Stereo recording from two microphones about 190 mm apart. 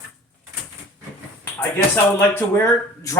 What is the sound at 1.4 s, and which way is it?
Speech, 10° left (ahead or behind).